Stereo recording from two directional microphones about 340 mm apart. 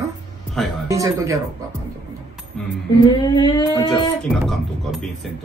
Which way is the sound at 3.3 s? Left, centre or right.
Centre.